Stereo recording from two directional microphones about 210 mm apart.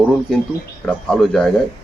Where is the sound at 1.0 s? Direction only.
Centre (ahead or behind).